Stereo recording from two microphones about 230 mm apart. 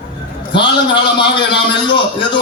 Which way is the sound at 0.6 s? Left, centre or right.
Left.